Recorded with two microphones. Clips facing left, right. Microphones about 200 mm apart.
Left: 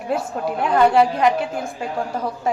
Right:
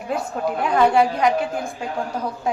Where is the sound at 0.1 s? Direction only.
5° left (ahead or behind).